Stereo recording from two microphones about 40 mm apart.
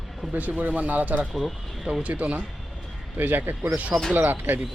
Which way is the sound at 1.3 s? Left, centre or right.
Centre.